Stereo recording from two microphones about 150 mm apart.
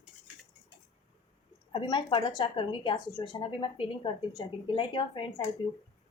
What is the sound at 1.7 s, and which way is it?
A woman's voice, 30° left (ahead or behind).